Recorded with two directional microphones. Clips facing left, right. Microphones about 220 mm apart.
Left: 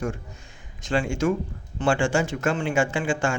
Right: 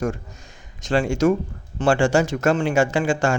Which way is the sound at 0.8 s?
40° right (ahead or behind).